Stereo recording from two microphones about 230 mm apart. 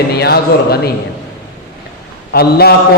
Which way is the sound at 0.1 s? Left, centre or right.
Left.